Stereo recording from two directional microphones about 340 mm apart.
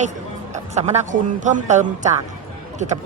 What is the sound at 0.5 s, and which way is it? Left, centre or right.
Speech, centre.